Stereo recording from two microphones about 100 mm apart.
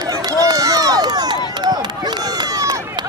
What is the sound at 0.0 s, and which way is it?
Run, 40° right (ahead or behind).